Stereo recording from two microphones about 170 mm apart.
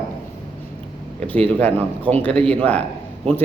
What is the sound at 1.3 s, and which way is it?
Speech, 10° left (ahead or behind).